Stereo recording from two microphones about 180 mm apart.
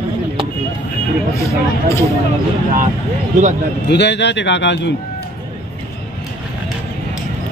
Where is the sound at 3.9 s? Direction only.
75° left (ahead or behind).